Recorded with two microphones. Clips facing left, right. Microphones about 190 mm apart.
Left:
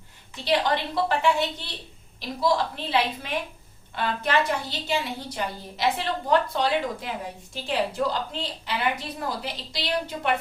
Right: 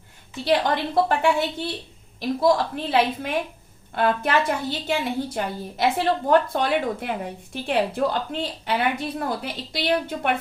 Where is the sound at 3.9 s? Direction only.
55° right (ahead or behind).